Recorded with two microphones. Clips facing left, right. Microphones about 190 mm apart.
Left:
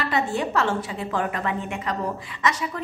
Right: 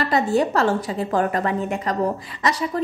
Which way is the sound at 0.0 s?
40° right (ahead or behind).